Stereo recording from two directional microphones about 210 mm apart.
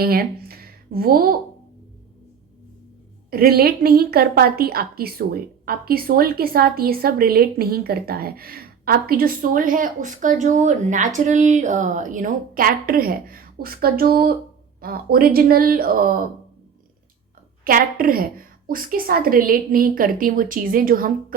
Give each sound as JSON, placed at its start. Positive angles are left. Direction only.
{"t": 0.0, "sound": "speech", "side_deg": -45}
{"t": 3.2, "sound": "a woman's voice", "side_deg": -45}
{"t": 17.6, "sound": "a woman's voice", "side_deg": -40}